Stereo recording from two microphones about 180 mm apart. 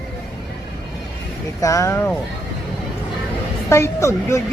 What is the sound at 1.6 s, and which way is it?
Speech, 15° left (ahead or behind).